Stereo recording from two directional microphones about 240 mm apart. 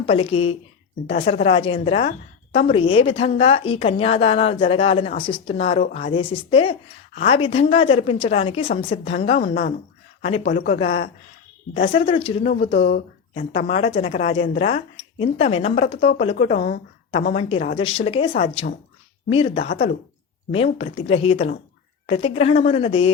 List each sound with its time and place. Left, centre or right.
0.0 s a woman's voice: left